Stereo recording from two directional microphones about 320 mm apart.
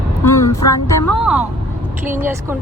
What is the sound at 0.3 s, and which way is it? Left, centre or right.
Music, centre.